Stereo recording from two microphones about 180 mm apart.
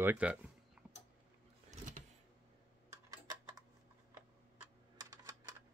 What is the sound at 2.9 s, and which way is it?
Typing, 20° right (ahead or behind).